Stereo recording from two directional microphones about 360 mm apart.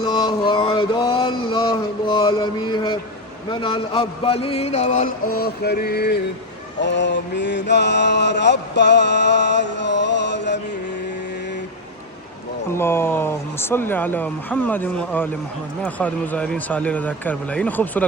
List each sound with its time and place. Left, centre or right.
0.0 s a sound: centre
6.8 s mantra: left
12.7 s speech: centre